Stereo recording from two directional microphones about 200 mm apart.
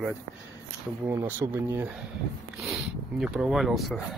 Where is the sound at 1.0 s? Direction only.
10° right (ahead or behind).